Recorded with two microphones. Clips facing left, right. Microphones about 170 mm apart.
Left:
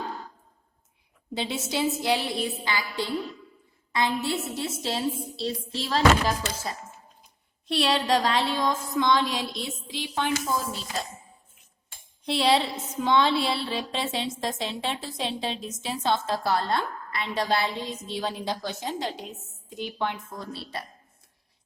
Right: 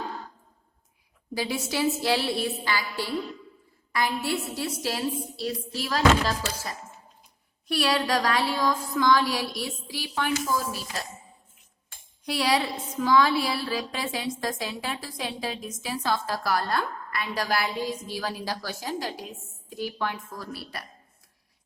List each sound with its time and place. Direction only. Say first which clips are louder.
1.3 s a woman's voice: right 1 dB; 25° left (ahead or behind)
12.2 s a woman's voice: left 2 dB; 25° left (ahead or behind)